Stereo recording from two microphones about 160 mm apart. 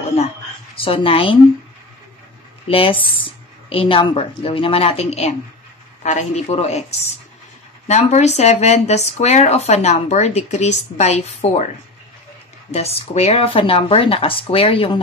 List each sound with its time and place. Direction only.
0.7 s speech: 35° left (ahead or behind)
2.7 s speech: 35° left (ahead or behind)
12.7 s speech: 40° left (ahead or behind)